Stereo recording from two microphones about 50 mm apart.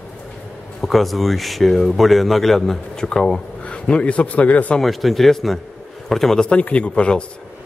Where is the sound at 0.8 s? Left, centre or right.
Centre.